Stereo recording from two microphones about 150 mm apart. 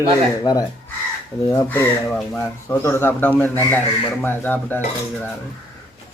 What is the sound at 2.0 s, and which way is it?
Speech, 5° left (ahead or behind).